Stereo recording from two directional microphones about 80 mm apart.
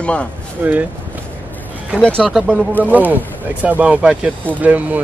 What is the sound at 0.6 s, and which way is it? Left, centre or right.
Speech, right.